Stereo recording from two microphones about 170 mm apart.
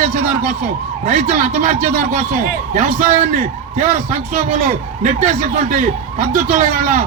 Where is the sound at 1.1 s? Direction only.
45° right (ahead or behind).